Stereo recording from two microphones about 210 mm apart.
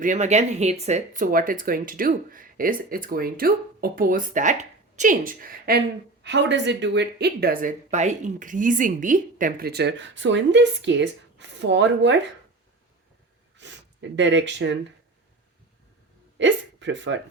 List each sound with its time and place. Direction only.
0.0 s speech: 35° right (ahead or behind)
6.2 s speech: 55° right (ahead or behind)
13.6 s speech: 60° right (ahead or behind)
16.4 s a sound: 60° right (ahead or behind)